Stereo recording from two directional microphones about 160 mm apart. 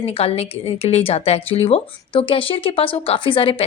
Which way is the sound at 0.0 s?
35° left (ahead or behind).